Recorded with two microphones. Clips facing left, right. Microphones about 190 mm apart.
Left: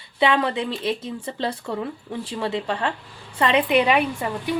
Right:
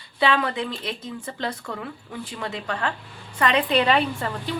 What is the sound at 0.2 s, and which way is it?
Speech, 20° left (ahead or behind).